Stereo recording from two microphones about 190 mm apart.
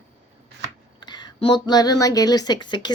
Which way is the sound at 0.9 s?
25° left (ahead or behind).